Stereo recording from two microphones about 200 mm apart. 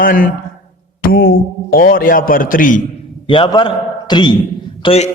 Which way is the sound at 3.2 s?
25° left (ahead or behind).